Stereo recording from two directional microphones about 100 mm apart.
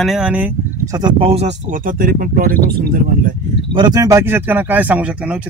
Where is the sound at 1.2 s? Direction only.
90° right.